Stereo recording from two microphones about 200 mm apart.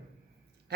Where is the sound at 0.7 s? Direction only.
55° right (ahead or behind).